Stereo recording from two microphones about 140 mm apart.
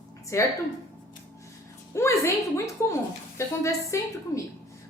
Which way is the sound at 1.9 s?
20° left (ahead or behind).